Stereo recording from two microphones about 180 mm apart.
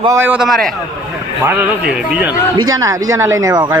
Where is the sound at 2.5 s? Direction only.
20° right (ahead or behind).